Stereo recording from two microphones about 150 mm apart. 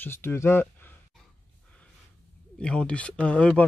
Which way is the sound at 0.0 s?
15° left (ahead or behind).